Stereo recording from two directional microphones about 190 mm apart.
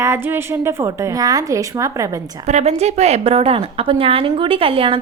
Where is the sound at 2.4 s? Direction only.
35° right (ahead or behind).